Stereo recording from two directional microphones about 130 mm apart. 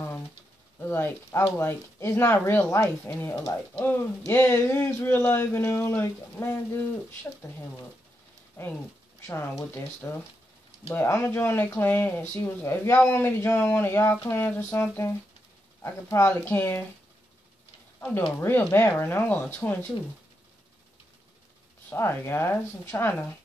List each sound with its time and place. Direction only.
0.7 s speech: 15° left (ahead or behind)
8.6 s speech: 20° left (ahead or behind)
18.4 s speech: 20° left (ahead or behind)
21.8 s speech: 15° left (ahead or behind)